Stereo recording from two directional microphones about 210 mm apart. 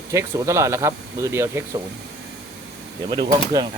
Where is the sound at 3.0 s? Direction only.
20° right (ahead or behind).